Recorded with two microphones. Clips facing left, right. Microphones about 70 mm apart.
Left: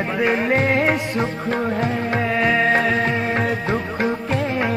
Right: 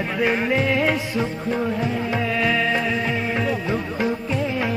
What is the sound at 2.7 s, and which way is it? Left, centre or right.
Music, left.